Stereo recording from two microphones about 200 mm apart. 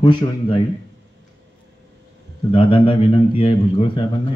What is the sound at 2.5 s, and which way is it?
A man's voice, 25° left (ahead or behind).